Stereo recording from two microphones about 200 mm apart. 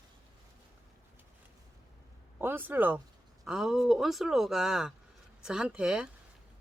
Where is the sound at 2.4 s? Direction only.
10° right (ahead or behind).